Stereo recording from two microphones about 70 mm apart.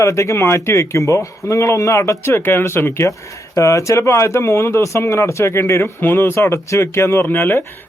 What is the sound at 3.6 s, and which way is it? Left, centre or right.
Speech, left.